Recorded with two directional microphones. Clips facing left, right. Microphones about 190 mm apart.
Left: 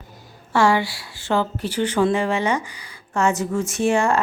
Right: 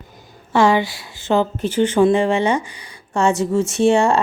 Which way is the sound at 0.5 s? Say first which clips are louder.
Right 3 dB; 20° right (ahead or behind).